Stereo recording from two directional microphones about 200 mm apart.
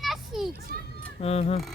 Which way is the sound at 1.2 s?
30° left (ahead or behind).